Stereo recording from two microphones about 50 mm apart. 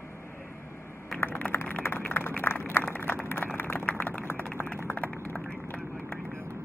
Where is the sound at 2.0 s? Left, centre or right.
Left.